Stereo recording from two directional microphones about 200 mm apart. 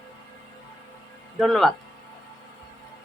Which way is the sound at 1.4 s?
Centre (ahead or behind).